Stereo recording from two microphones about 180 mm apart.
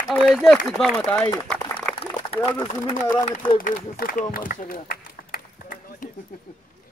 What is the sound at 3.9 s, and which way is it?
Speech, 55° left (ahead or behind).